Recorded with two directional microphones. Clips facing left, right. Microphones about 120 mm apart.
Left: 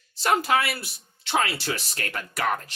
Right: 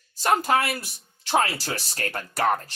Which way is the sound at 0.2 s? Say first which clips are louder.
Right 1 dB; 40° right (ahead or behind).